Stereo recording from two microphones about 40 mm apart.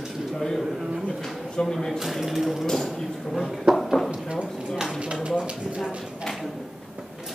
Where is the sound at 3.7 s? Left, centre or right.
Centre.